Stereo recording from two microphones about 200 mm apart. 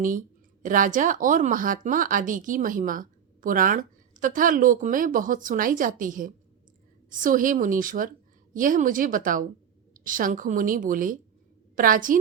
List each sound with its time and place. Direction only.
0.6 s a woman's voice: 40° right (ahead or behind)